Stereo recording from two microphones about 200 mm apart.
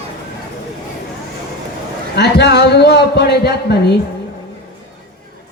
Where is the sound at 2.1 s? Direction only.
55° left (ahead or behind).